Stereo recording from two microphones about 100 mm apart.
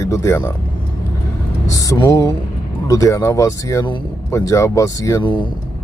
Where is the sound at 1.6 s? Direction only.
35° left (ahead or behind).